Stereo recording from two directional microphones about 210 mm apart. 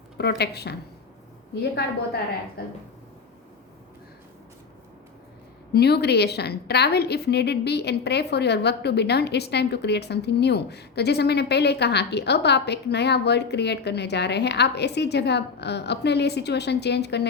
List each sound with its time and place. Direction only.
0.2 s a woman's voice: 50° left (ahead or behind)
2.6 s a woman's voice: 45° left (ahead or behind)
5.7 s a woman's voice: 50° left (ahead or behind)